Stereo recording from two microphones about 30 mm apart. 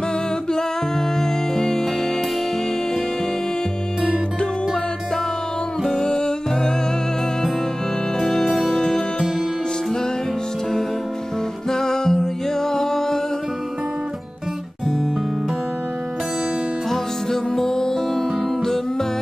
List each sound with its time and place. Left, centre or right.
1.2 s music: centre
5.9 s music: left
8.2 s music: centre
11.7 s music: centre
16.9 s music: centre